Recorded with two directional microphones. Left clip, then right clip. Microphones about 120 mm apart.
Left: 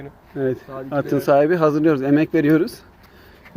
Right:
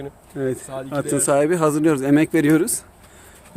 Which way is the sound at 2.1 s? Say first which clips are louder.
Even; 25° right (ahead or behind).